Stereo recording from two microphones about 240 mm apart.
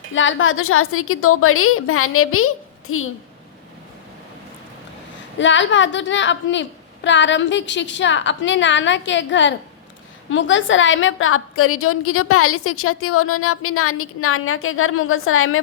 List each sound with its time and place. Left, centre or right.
0.1 s a woman's voice: left
5.4 s a woman's voice: left